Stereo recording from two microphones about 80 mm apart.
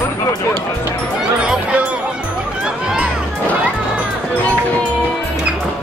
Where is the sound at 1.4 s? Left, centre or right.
Centre.